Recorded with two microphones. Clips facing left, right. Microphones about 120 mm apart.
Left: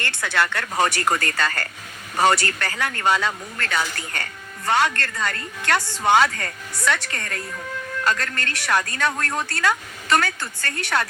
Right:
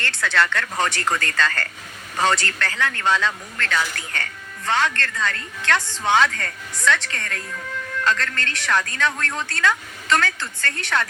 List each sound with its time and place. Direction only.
0.0 s speech: 15° left (ahead or behind)